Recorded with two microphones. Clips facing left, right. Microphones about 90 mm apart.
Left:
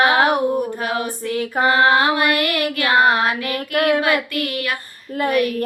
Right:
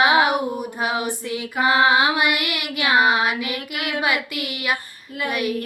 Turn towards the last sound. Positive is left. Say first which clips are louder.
# left 4 dB
turn(degrees=-15)  # may be behind; listen again after turning